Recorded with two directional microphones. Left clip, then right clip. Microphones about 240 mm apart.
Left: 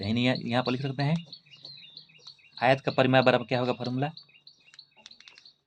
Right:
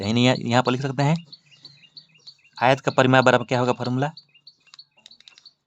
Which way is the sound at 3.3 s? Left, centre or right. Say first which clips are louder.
Right 6 dB; right.